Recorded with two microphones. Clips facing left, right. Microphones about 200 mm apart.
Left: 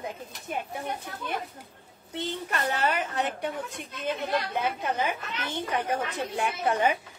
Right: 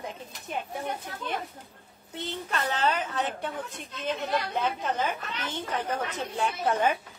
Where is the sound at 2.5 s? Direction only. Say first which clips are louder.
Even; 10° left (ahead or behind).